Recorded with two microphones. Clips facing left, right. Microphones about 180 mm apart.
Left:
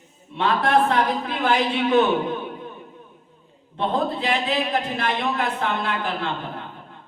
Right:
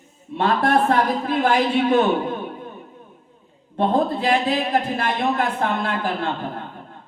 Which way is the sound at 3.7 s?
50° right (ahead or behind).